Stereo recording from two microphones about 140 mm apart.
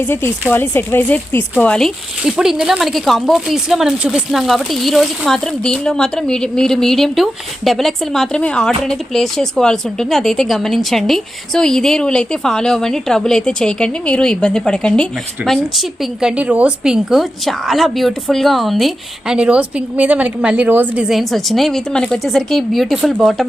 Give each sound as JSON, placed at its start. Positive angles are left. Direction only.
{"t": 0.0, "sound": "speech", "side_deg": 15}